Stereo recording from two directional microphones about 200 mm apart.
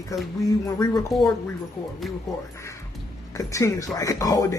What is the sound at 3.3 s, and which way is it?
Speech, 15° left (ahead or behind).